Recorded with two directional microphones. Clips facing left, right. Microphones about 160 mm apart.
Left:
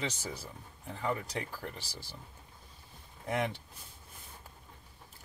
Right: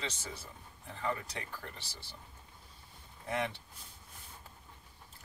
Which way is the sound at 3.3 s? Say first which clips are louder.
Left 2 dB; 20° left (ahead or behind).